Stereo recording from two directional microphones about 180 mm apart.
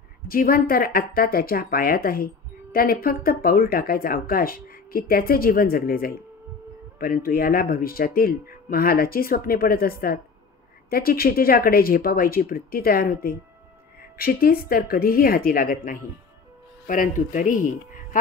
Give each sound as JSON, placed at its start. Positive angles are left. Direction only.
{"t": 0.3, "sound": "speech", "side_deg": 55}